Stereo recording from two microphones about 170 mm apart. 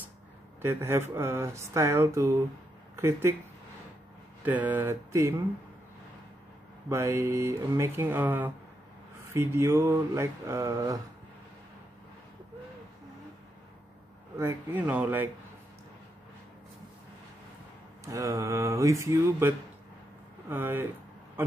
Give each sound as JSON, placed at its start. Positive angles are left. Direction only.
{"t": 0.6, "sound": "speech", "side_deg": -15}
{"t": 4.4, "sound": "speech", "side_deg": -10}
{"t": 6.9, "sound": "speech", "side_deg": -15}
{"t": 14.4, "sound": "speech", "side_deg": -10}
{"t": 18.0, "sound": "speech", "side_deg": -15}
{"t": 21.4, "sound": "a sound", "side_deg": -15}